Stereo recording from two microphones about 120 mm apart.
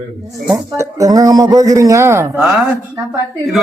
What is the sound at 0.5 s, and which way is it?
A man's voice, 25° right (ahead or behind).